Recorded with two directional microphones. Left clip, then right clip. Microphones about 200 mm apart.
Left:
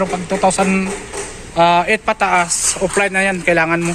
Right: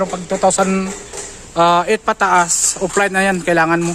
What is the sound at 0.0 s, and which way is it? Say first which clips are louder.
Speech: even; 50° right (ahead or behind).